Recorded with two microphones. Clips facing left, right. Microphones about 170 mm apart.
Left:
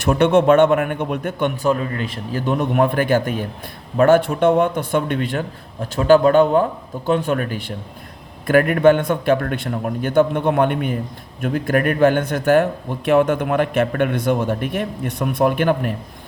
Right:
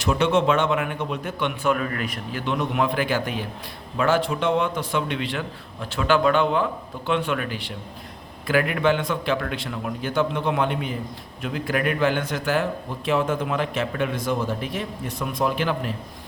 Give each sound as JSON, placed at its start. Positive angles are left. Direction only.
{"t": 0.0, "sound": "a man's voice", "side_deg": 55}
{"t": 1.7, "sound": "a man's voice", "side_deg": 30}
{"t": 2.3, "sound": "a man's voice", "side_deg": 45}